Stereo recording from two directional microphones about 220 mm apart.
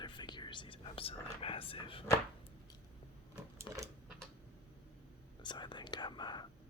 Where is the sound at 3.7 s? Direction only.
20° left (ahead or behind).